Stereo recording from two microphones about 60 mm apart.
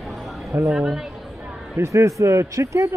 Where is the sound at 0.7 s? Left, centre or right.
Centre.